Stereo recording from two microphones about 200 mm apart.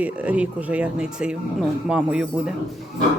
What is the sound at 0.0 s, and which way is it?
Speech, 5° right (ahead or behind).